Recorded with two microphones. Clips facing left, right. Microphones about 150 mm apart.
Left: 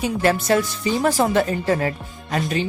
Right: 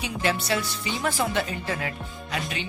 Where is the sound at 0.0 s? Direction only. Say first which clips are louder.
Left 7 dB; 45° left (ahead or behind).